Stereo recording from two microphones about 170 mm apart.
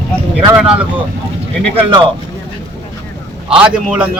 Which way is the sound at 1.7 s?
30° right (ahead or behind).